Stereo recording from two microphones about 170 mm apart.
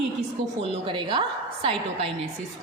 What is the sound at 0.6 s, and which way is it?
A woman's voice, 30° right (ahead or behind).